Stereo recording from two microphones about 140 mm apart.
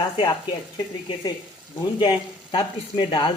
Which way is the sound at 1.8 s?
35° left (ahead or behind).